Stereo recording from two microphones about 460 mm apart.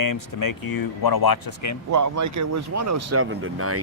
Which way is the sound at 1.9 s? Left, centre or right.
Right.